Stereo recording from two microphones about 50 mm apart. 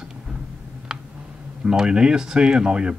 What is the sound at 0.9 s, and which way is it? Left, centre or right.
Tick, centre.